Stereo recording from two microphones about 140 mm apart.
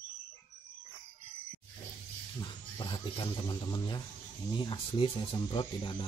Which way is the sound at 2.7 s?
30° left (ahead or behind).